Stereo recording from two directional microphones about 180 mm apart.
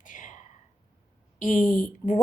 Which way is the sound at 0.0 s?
45° left (ahead or behind).